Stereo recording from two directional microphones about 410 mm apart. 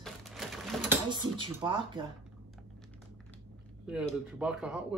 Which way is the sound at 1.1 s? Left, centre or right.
Centre.